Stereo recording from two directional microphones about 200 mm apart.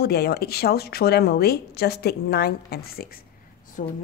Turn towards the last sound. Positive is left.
turn(degrees=40)  # may be behind; listen again after turning